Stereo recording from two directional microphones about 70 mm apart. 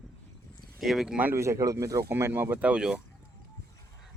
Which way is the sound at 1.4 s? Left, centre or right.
Right.